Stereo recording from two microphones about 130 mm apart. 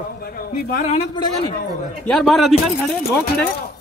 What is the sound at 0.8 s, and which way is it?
Speech, 50° left (ahead or behind).